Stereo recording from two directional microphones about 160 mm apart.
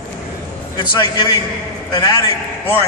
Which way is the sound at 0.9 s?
25° left (ahead or behind).